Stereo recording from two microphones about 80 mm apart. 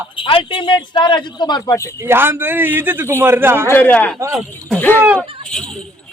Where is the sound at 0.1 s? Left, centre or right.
Left.